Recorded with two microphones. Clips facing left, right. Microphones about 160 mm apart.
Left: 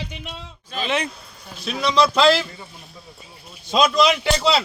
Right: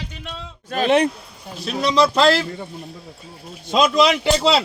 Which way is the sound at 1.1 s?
10° right (ahead or behind).